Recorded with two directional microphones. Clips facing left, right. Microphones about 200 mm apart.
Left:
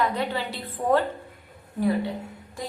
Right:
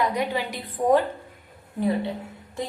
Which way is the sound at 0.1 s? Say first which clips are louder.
Right 2 dB; 15° right (ahead or behind).